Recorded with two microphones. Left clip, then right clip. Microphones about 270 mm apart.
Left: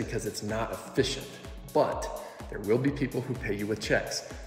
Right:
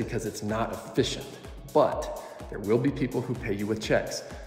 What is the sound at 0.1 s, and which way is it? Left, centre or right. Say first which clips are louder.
Speech: right 2 dB; centre.